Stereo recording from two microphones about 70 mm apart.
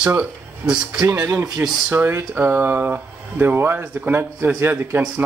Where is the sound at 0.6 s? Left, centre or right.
Right.